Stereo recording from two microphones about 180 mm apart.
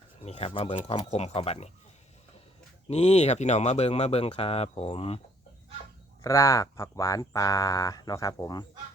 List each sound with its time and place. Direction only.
0.2 s speech: 35° left (ahead or behind)
2.9 s speech: 35° left (ahead or behind)
6.2 s speech: 20° left (ahead or behind)